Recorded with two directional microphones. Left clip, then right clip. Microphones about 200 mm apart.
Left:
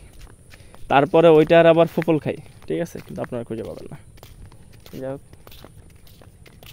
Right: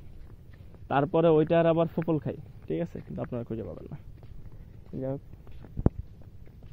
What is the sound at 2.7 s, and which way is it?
Speech, 30° left (ahead or behind).